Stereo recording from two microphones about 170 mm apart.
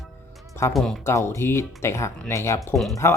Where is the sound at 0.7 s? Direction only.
Centre (ahead or behind).